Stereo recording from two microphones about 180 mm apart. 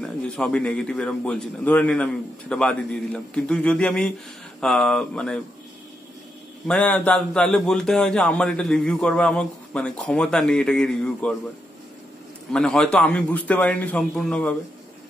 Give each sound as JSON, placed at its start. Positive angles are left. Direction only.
{"t": 0.0, "sound": "a man's voice", "side_deg": 5}
{"t": 6.7, "sound": "a man's voice", "side_deg": 10}
{"t": 12.5, "sound": "a man's voice", "side_deg": 5}